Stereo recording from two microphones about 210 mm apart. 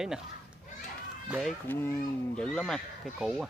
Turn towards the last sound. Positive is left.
turn(degrees=0)  # may be behind; listen again after turning